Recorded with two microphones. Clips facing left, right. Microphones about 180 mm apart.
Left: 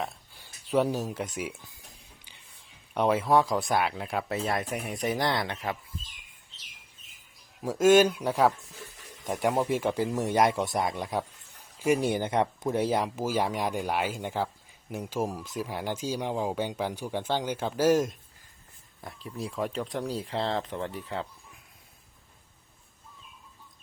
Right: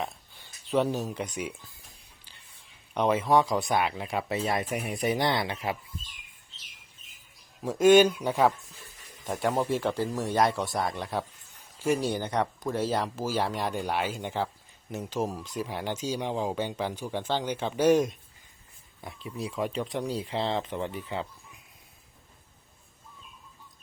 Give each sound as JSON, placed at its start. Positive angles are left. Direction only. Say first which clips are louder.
{"t": 0.0, "sound": "speech", "louder": "even", "side_deg": 10}
{"t": 2.9, "sound": "speech", "louder": "even", "side_deg": 5}
{"t": 7.6, "sound": "speech", "louder": "right 1 dB", "side_deg": 0}
{"t": 9.6, "sound": "speech", "louder": "left 1 dB", "side_deg": 15}
{"t": 10.9, "sound": "speech", "louder": "left 1 dB", "side_deg": 5}
{"t": 11.9, "sound": "speech", "louder": "left 2 dB", "side_deg": 20}